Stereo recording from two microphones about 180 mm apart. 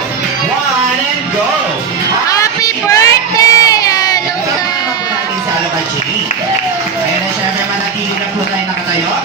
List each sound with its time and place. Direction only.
2.2 s child singing: 20° left (ahead or behind)